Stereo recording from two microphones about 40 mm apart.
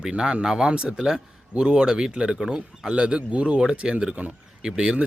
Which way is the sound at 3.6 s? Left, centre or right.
Centre.